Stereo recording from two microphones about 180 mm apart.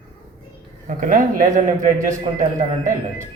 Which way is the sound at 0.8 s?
45° right (ahead or behind).